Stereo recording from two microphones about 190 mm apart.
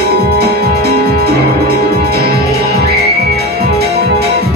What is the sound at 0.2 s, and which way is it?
Music, 55° right (ahead or behind).